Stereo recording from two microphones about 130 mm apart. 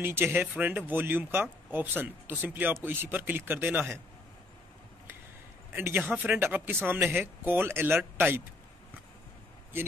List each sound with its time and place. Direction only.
0.0 s speech: 15° right (ahead or behind)
5.7 s speech: 15° right (ahead or behind)